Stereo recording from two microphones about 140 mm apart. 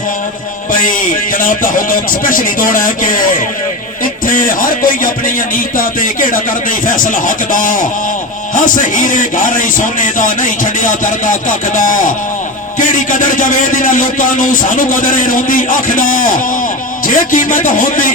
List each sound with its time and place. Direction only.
0.7 s speech: 75° left (ahead or behind)